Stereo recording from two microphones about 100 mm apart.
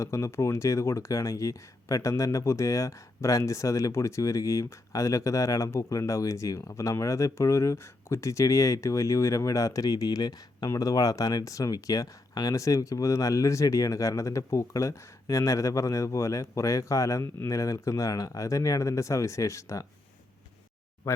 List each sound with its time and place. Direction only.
0.0 s speech: 30° left (ahead or behind)